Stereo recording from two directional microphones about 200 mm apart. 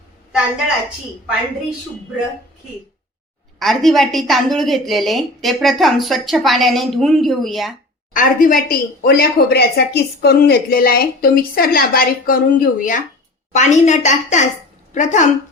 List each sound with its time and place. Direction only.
3.6 s a woman's voice: centre (ahead or behind)
8.1 s a woman's voice: 40° left (ahead or behind)